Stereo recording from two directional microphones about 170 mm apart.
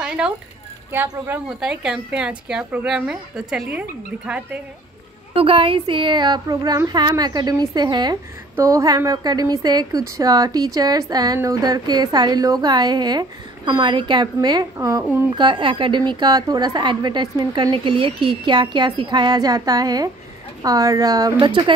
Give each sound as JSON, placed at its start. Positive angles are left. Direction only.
{"t": 0.9, "sound": "a woman's voice", "side_deg": -10}
{"t": 5.3, "sound": "a woman's voice", "side_deg": -35}
{"t": 15.3, "sound": "a woman's voice", "side_deg": -25}